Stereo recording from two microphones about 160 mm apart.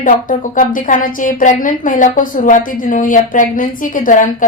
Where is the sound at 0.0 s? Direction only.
55° left (ahead or behind).